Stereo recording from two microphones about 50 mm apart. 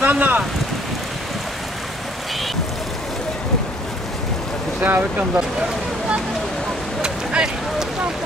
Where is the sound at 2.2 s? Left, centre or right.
Centre.